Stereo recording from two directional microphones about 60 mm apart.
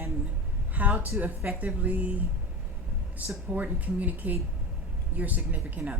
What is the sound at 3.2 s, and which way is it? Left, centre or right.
Speech, right.